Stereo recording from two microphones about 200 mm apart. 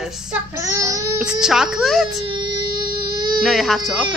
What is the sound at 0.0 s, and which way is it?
Child singing, 5° right (ahead or behind).